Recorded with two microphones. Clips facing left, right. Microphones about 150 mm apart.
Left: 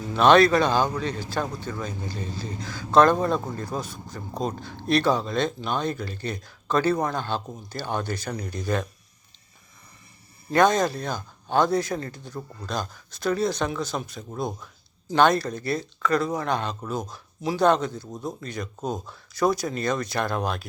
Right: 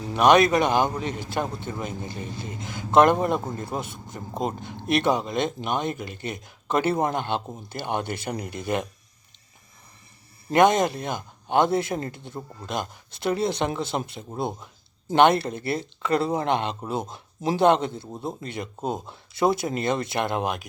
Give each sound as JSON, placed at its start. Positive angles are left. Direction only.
{"t": 0.1, "sound": "speech", "side_deg": -15}
{"t": 10.5, "sound": "speech", "side_deg": -20}